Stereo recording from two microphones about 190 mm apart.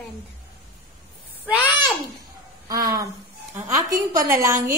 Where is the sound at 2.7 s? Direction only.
20° right (ahead or behind).